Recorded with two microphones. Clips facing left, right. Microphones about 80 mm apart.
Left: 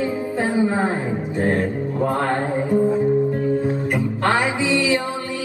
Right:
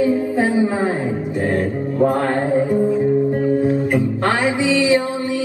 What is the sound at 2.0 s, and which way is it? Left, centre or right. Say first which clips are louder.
Mantra: right 3 dB; right.